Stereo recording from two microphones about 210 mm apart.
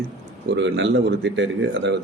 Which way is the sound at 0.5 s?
60° right (ahead or behind).